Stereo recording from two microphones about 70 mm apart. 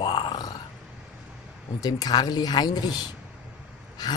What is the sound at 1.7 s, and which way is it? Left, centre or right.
Speech, left.